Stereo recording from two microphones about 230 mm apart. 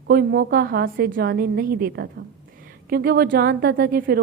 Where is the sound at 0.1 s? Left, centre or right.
Right.